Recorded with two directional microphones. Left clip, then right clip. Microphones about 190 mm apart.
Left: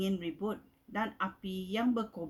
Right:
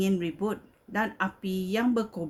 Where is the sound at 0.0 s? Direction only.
50° right (ahead or behind).